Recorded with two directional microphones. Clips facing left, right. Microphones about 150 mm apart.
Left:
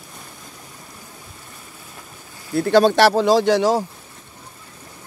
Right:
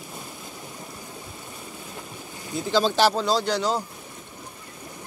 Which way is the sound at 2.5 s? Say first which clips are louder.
Left 8 dB; 65° left (ahead or behind).